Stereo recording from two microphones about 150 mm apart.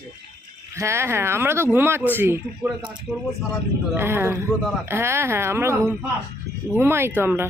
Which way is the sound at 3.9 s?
15° right (ahead or behind).